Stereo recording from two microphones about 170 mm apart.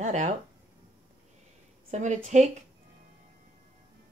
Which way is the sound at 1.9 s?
45° right (ahead or behind).